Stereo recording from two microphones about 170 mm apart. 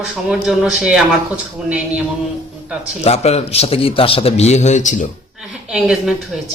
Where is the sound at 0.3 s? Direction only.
5° right (ahead or behind).